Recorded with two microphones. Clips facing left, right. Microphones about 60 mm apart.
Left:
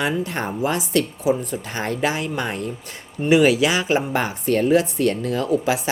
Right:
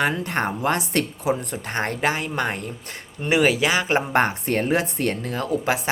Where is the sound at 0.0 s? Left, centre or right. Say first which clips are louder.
Right 1 dB; right.